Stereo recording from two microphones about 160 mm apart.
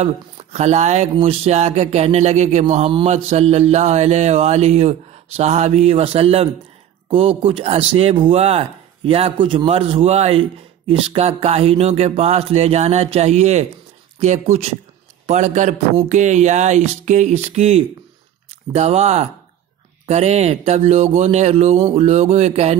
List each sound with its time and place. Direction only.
0.0 s a man's voice: 40° right (ahead or behind)